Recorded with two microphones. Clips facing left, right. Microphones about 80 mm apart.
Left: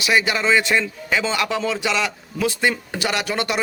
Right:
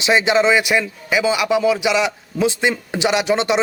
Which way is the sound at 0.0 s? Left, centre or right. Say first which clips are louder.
Right 5 dB; right.